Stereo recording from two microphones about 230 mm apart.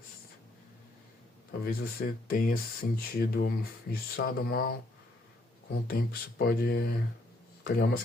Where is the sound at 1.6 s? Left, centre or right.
Left.